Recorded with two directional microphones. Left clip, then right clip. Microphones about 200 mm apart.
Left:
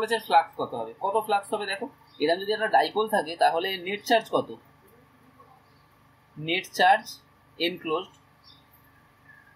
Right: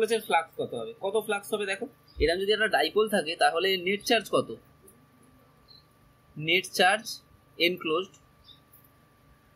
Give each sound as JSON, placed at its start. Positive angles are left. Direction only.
{"t": 0.0, "sound": "speech", "side_deg": -15}
{"t": 6.4, "sound": "speech", "side_deg": -25}